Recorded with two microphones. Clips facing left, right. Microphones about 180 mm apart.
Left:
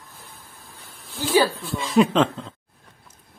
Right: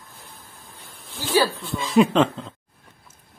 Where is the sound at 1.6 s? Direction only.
Centre (ahead or behind).